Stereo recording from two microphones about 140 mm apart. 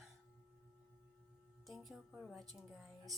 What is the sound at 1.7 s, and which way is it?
A woman's voice, centre (ahead or behind).